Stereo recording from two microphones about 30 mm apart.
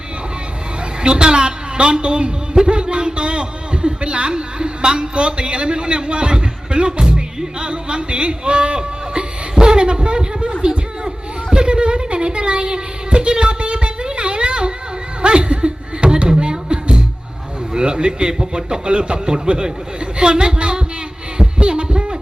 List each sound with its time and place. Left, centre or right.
1.0 s a woman's voice: right
10.6 s a sound: right
11.5 s a sound: right
15.2 s laughter: right
16.1 s music: right
17.7 s a man's voice: right
21.3 s heart murmur: right